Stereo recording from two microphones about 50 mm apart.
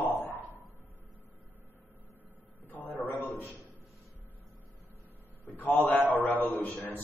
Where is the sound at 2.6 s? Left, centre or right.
Left.